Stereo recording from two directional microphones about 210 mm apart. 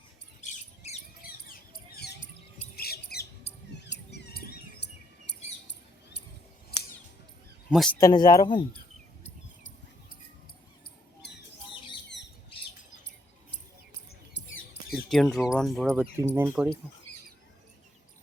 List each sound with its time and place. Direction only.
0.4 s rodents: 35° left (ahead or behind)
1.5 s rodents: 50° left (ahead or behind)
2.7 s squawk: 50° left (ahead or behind)
3.7 s a sound: 55° left (ahead or behind)
7.7 s speech: centre (ahead or behind)
7.9 s speech: 20° left (ahead or behind)
11.2 s squawk: 55° left (ahead or behind)
11.6 s bird: 25° left (ahead or behind)
12.0 s squawk: 55° left (ahead or behind)
14.3 s a sound: 55° left (ahead or behind)
15.1 s speech: centre (ahead or behind)
16.1 s speech: 10° right (ahead or behind)